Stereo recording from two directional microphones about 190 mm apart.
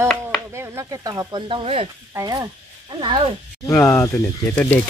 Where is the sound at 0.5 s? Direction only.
15° right (ahead or behind); by 1.9 s 30° right (ahead or behind).